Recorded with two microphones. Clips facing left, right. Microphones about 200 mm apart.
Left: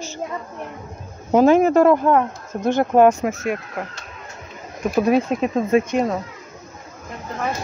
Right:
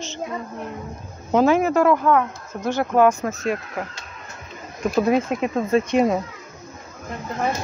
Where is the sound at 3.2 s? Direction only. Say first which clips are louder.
Left 1 dB; 5° left (ahead or behind).